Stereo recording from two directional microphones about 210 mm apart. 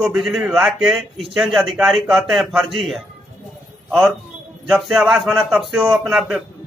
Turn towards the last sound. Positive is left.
turn(degrees=-5)  # may be behind; listen again after turning